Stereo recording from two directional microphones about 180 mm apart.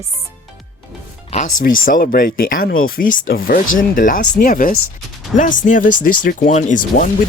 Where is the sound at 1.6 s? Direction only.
50° left (ahead or behind).